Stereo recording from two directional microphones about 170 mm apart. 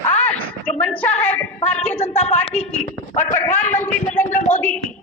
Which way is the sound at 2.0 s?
35° left (ahead or behind).